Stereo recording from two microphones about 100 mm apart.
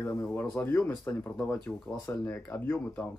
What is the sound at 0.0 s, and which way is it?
Speech, 25° left (ahead or behind).